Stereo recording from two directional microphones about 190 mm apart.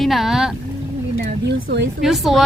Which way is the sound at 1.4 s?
60° right (ahead or behind).